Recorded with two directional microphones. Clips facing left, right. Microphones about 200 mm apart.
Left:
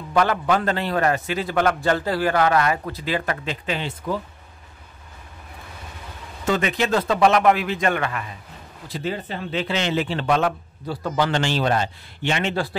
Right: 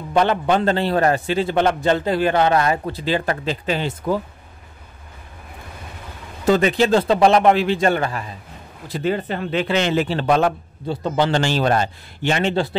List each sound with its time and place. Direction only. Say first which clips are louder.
0.1 s a man's voice: right 2 dB; 25° right (ahead or behind); by 4.2 s 45° right (ahead or behind)
6.4 s a man's voice: right 6 dB; 35° right (ahead or behind)
8.9 s a man's voice: right 6 dB; 60° right (ahead or behind); by 10.5 s 35° right (ahead or behind)
10.9 s a man's voice: right 3 dB; 25° right (ahead or behind)
11.4 s a man's voice: right 3 dB; 45° right (ahead or behind)